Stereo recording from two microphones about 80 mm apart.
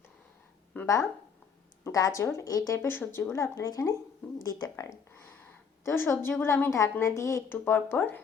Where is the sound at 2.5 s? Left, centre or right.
Left.